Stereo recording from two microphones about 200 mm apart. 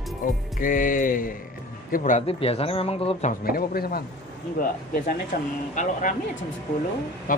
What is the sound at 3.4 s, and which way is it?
Speech, 50° left (ahead or behind).